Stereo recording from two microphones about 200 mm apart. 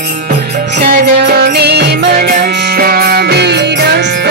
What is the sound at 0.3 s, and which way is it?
Music, 50° right (ahead or behind).